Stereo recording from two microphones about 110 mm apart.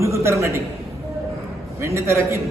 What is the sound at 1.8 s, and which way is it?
Speech, 25° right (ahead or behind).